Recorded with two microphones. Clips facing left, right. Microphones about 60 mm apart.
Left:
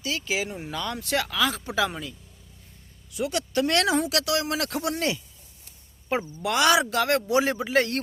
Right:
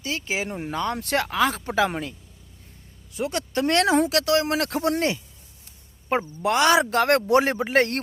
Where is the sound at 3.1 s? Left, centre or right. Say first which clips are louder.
Even; right.